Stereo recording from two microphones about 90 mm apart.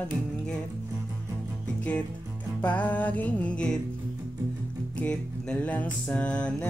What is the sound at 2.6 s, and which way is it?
Music, 20° left (ahead or behind).